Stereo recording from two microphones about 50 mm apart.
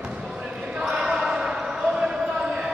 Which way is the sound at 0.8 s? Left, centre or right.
Centre.